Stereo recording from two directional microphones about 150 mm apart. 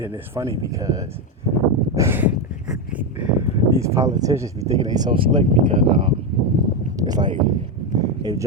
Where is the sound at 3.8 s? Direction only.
20° right (ahead or behind).